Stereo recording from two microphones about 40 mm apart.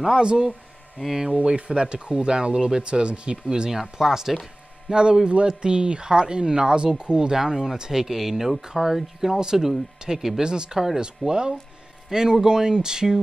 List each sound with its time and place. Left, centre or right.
0.1 s speech: right
1.0 s speech: centre
1.3 s speech: right
4.0 s speech: centre
4.9 s speech: right